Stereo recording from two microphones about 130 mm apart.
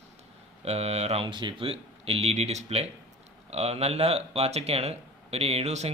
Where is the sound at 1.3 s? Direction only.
40° right (ahead or behind).